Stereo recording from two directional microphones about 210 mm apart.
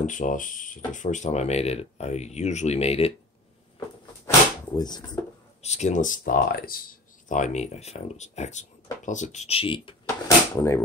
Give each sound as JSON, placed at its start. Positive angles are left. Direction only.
{"t": 0.0, "sound": "speech", "side_deg": 40}
{"t": 4.7, "sound": "speech", "side_deg": 20}
{"t": 5.6, "sound": "speech", "side_deg": 30}